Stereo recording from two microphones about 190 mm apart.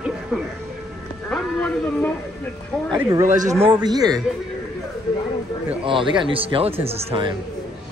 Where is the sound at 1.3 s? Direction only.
10° left (ahead or behind).